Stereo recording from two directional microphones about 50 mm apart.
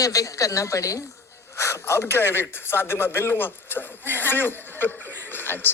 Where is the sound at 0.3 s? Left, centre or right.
Left.